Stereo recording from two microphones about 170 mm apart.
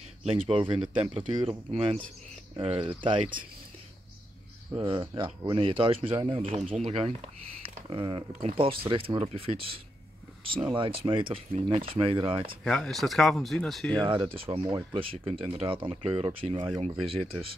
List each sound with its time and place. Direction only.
0.2 s speech: 35° right (ahead or behind)
1.7 s speech: 35° right (ahead or behind)
4.8 s speech: 30° right (ahead or behind)
12.6 s speech: 5° left (ahead or behind)
13.9 s speech: 30° right (ahead or behind)